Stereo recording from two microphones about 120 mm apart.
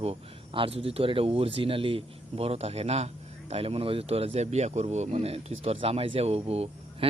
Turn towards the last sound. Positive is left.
turn(degrees=-60)  # may be behind; listen again after turning